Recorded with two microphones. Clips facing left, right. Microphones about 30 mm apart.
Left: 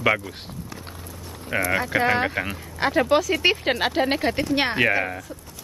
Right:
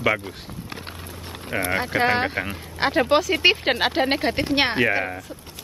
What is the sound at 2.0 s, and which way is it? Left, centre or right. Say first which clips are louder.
Speech: even; right.